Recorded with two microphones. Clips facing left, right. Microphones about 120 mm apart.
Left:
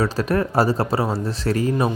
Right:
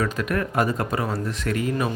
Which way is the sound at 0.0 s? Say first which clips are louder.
Left 4 dB; 30° left (ahead or behind).